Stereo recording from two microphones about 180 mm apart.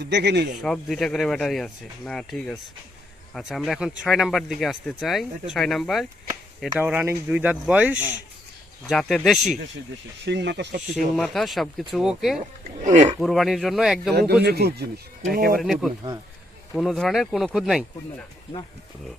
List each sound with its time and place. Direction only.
0.0 s speech: 70° right (ahead or behind)
0.6 s speech: centre (ahead or behind)
8.9 s speech: centre (ahead or behind)
10.2 s speech: 70° right (ahead or behind)
10.9 s speech: centre (ahead or behind)
12.4 s speech: 40° right (ahead or behind)
13.1 s speech: centre (ahead or behind)
14.1 s speech: 60° right (ahead or behind)
15.5 s speech: centre (ahead or behind)